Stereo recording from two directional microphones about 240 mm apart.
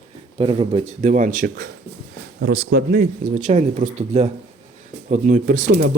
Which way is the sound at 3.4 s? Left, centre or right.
Right.